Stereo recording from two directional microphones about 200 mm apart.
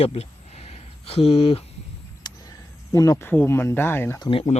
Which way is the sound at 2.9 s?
15° left (ahead or behind).